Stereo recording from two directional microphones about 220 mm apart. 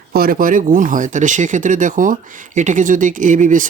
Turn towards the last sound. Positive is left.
turn(degrees=-35)  # may be behind; listen again after turning